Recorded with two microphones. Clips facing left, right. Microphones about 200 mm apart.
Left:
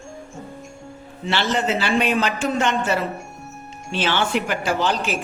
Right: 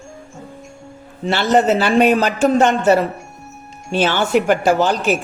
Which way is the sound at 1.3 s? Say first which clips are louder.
Right 7 dB; 45° right (ahead or behind).